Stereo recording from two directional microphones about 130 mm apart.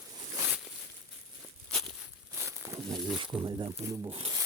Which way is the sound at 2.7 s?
25° right (ahead or behind).